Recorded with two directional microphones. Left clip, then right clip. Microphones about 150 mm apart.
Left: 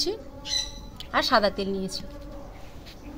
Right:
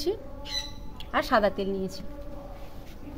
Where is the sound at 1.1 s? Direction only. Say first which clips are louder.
Left 2 dB; 15° right (ahead or behind).